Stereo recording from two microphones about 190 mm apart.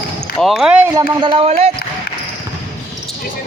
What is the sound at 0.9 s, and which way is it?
Speech, 25° right (ahead or behind).